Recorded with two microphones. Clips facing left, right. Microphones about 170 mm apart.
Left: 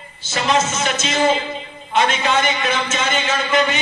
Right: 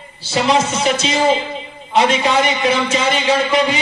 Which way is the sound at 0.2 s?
35° right (ahead or behind).